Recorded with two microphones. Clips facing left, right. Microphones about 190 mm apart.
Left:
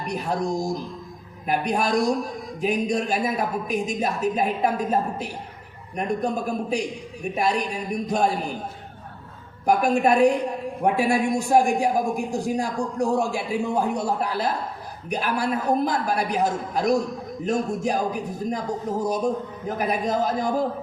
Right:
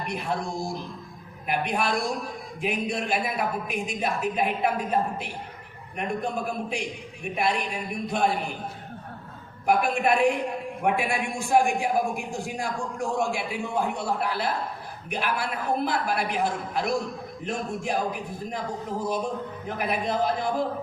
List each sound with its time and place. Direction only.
0.0 s a man's voice: 40° left (ahead or behind)
9.6 s a man's voice: 40° left (ahead or behind)